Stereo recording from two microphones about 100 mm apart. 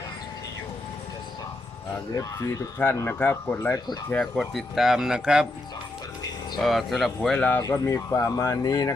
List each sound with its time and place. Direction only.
2.1 s speech: 35° left (ahead or behind)
2.7 s speech: 25° left (ahead or behind)
4.2 s speech: centre (ahead or behind)
6.6 s speech: centre (ahead or behind)
7.2 s speech: 15° left (ahead or behind)
7.6 s speech: 30° left (ahead or behind)